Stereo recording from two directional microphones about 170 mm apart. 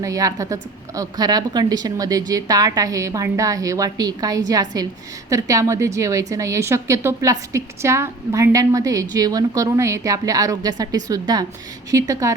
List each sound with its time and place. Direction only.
0.0 s a woman's voice: 20° right (ahead or behind)